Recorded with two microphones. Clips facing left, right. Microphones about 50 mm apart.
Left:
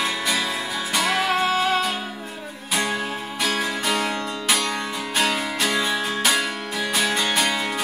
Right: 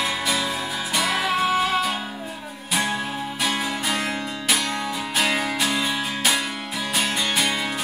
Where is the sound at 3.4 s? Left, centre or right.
Centre.